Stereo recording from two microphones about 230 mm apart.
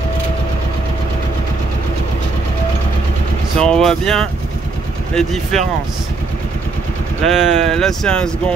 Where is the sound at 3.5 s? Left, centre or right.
Centre.